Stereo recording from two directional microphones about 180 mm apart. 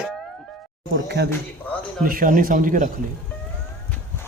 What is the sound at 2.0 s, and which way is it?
Speech, 50° right (ahead or behind).